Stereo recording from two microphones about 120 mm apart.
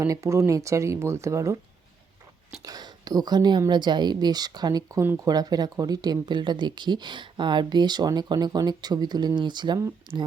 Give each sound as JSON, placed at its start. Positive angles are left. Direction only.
{"t": 0.0, "sound": "speech", "side_deg": -25}
{"t": 2.6, "sound": "speech", "side_deg": -35}